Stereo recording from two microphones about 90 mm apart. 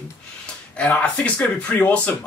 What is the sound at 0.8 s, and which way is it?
Speech, 15° left (ahead or behind).